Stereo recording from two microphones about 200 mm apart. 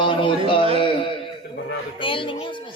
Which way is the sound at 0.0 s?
25° left (ahead or behind).